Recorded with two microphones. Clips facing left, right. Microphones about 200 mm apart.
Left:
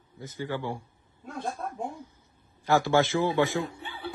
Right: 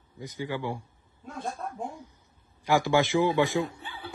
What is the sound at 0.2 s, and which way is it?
Speech, 15° right (ahead or behind).